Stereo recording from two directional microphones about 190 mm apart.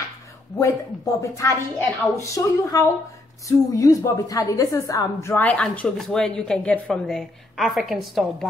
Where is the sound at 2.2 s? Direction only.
15° left (ahead or behind).